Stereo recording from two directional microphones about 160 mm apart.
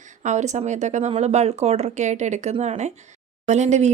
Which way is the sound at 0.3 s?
45° right (ahead or behind).